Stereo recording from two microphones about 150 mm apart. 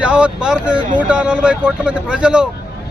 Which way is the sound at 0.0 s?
5° right (ahead or behind).